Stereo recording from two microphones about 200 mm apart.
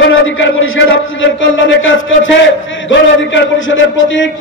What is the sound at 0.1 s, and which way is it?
Speech, 80° left.